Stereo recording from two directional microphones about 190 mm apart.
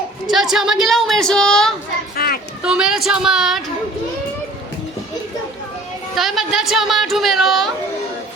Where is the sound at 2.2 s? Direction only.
55° left (ahead or behind).